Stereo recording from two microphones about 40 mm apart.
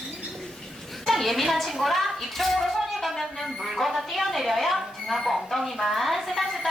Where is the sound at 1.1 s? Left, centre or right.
Centre.